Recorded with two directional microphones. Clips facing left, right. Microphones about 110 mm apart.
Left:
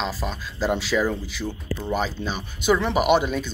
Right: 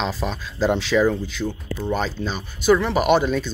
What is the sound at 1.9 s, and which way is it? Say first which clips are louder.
Speech: right 1 dB; 10° left (ahead or behind).